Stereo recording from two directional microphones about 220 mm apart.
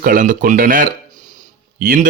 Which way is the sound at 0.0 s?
40° right (ahead or behind).